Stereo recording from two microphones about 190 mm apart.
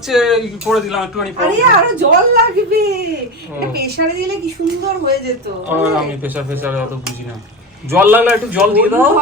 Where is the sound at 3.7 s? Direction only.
55° right (ahead or behind).